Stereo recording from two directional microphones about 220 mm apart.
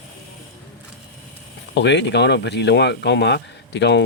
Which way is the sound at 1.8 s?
50° left (ahead or behind).